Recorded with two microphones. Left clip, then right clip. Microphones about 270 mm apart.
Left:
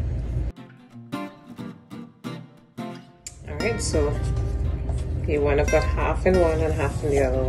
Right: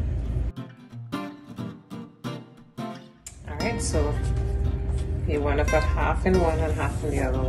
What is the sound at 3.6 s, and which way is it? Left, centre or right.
Music, centre.